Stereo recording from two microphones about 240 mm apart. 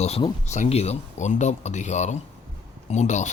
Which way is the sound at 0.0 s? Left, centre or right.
Left.